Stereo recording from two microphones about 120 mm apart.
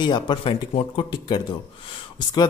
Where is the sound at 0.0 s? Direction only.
40° left (ahead or behind).